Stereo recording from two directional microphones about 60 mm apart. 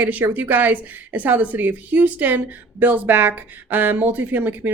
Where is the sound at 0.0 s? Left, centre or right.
Right.